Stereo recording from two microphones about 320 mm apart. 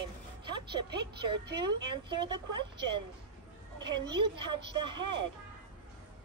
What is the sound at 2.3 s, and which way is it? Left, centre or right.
Speech, right.